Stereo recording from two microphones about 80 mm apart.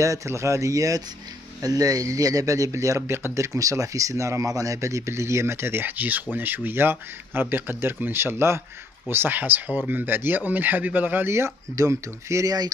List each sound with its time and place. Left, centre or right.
0.0 s a man's voice: right